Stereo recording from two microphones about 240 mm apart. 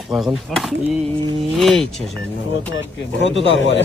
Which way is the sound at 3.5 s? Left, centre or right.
Left.